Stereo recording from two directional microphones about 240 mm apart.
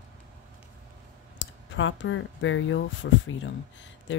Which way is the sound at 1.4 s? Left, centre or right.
Left.